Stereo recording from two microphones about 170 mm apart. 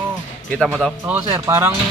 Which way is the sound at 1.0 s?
10° right (ahead or behind).